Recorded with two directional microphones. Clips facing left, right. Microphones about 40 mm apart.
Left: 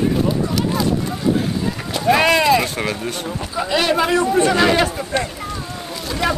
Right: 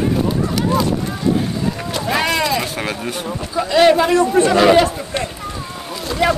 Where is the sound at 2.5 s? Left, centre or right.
Centre.